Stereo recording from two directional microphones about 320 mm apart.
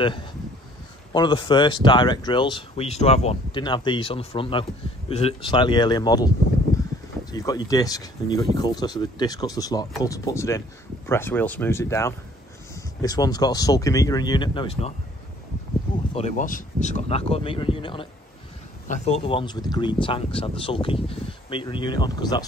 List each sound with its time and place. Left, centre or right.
1.1 s speech: centre
6.7 s a sound: centre
7.2 s speech: centre
16.1 s speech: centre